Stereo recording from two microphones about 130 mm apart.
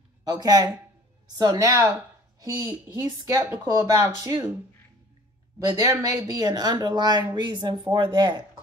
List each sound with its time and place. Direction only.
0.2 s speech: 30° right (ahead or behind)
5.8 s speech: 25° right (ahead or behind)